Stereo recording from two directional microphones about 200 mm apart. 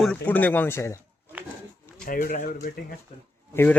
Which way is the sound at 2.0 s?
45° left (ahead or behind).